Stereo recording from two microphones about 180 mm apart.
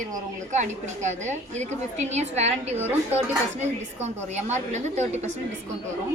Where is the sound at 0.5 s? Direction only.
40° right (ahead or behind).